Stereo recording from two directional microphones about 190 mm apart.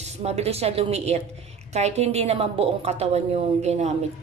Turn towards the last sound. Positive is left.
turn(degrees=-35)  # may be behind; listen again after turning